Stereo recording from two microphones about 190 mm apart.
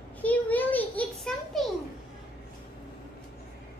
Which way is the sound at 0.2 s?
10° left (ahead or behind).